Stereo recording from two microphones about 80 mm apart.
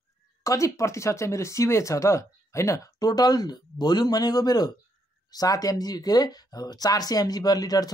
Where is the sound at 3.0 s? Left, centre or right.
Left.